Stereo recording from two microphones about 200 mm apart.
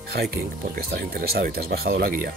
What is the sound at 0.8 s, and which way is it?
Speech, 50° right (ahead or behind).